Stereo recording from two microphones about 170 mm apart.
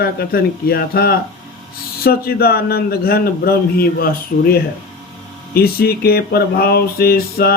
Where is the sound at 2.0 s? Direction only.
65° left (ahead or behind).